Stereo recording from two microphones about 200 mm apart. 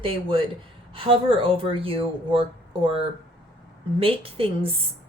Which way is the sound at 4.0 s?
30° right (ahead or behind).